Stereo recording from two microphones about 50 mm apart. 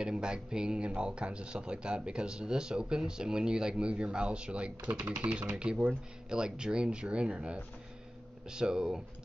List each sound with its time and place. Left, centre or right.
0.0 s a man's voice: centre